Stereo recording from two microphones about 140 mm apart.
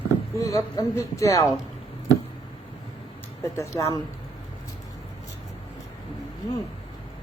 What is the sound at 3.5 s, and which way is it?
Speech, 20° left (ahead or behind).